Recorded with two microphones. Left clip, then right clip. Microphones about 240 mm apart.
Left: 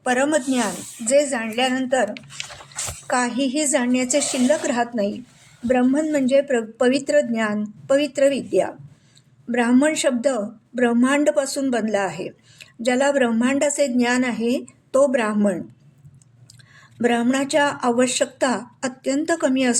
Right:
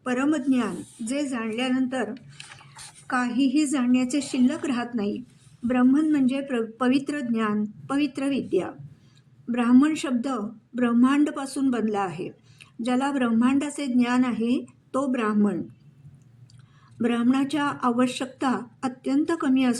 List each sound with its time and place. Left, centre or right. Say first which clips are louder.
0.1 s a woman's voice: left 5 dB; centre
3.1 s a woman's voice: left 3 dB; centre
17.1 s a woman's voice: left 5 dB; centre